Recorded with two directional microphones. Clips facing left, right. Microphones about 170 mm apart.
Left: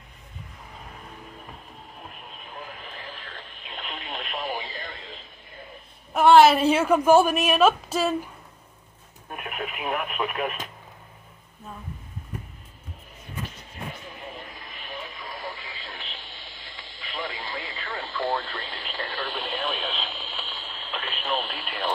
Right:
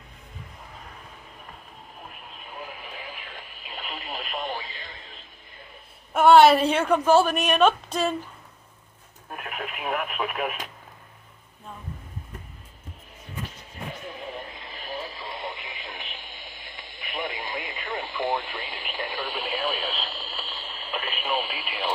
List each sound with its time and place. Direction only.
2.8 s radio: 10° right (ahead or behind)
6.1 s a woman's voice: centre (ahead or behind)
9.3 s speech: centre (ahead or behind)
14.5 s radio: 20° right (ahead or behind)
14.8 s radio: 35° right (ahead or behind); by 16.3 s 15° right (ahead or behind)
16.3 s radio: 50° right (ahead or behind)
17.0 s radio: 20° right (ahead or behind)